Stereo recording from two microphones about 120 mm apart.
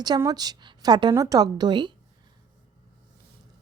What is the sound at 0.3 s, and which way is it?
A woman's voice, 35° right (ahead or behind).